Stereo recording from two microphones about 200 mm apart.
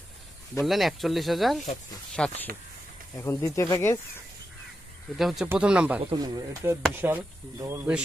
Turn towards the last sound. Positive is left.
turn(degrees=-10)  # may be behind; listen again after turning